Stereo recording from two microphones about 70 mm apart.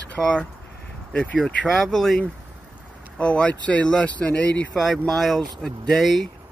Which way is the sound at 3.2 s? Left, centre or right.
Centre.